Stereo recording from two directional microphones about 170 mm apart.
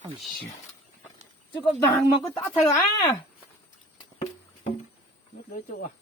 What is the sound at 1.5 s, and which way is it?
Speech, 30° left (ahead or behind).